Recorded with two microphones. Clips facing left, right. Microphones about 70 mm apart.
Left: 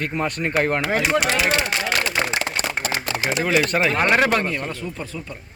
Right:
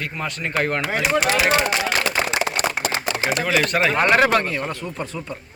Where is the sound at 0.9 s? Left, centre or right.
Centre.